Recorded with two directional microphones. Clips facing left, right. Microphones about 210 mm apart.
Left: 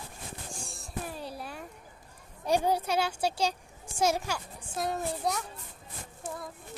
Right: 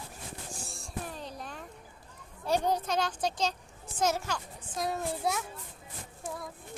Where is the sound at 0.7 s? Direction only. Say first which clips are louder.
Left 2 dB; 5° left (ahead or behind).